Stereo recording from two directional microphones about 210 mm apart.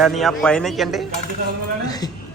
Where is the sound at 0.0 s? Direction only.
Centre (ahead or behind).